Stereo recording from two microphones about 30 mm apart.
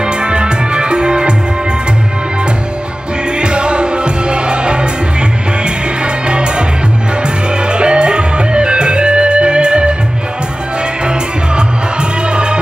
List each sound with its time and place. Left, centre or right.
0.0 s music: right
3.3 s music: right
6.2 s music: right
7.6 s music: right
11.1 s music: right